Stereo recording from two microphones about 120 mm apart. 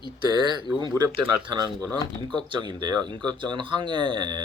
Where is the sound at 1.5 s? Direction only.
35° right (ahead or behind).